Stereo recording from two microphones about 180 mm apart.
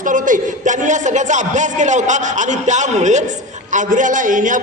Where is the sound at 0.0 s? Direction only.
45° right (ahead or behind).